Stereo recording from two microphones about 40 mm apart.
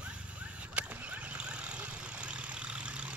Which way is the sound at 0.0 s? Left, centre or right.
Right.